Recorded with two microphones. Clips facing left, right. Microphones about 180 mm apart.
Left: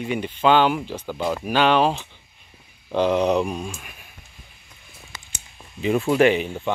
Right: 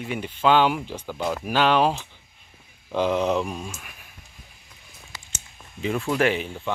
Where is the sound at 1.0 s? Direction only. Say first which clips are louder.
Left 2 dB; 5° left (ahead or behind).